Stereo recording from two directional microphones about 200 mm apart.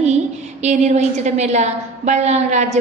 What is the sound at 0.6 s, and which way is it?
A woman's voice, 35° right (ahead or behind).